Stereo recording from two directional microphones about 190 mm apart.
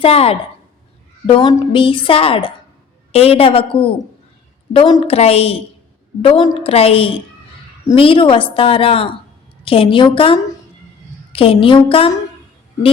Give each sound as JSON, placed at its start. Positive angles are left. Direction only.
{"t": 0.0, "sound": "a woman's voice", "side_deg": 30}